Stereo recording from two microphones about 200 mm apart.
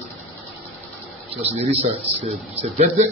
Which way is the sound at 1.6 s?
30° right (ahead or behind).